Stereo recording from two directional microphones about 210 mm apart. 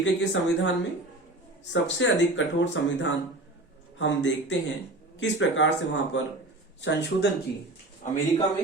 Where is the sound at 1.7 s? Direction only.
60° left (ahead or behind).